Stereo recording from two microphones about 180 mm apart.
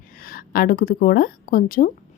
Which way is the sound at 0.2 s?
55° left (ahead or behind).